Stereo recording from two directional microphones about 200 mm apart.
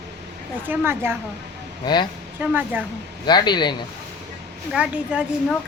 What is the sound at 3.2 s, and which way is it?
Speech, 20° left (ahead or behind).